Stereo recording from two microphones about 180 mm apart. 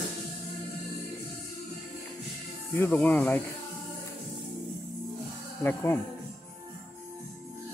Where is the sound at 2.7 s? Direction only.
10° left (ahead or behind).